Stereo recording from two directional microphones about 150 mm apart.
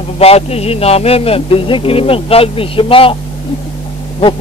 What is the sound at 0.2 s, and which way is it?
A man's voice, 40° left (ahead or behind).